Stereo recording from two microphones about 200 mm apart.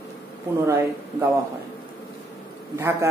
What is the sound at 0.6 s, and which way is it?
Speech, 15° right (ahead or behind).